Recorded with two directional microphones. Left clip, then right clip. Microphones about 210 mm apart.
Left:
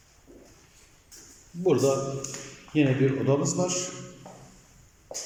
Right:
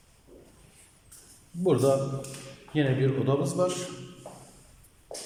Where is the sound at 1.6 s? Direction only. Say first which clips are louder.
Even; centre (ahead or behind).